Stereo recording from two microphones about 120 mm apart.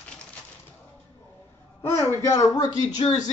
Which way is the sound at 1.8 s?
25° left (ahead or behind).